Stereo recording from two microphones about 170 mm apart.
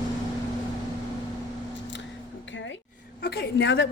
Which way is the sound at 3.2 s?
80° left.